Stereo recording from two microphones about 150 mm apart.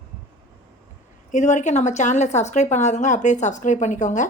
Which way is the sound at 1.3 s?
55° left (ahead or behind).